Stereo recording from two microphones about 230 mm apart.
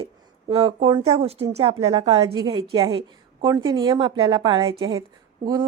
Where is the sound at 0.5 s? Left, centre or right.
Right.